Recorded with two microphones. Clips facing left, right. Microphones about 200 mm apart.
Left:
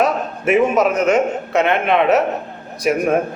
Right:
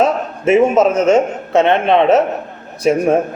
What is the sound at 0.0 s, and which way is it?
A man's voice, 30° right (ahead or behind).